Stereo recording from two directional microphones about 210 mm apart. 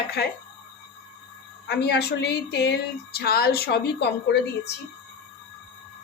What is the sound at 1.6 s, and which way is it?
Speech, 50° left (ahead or behind).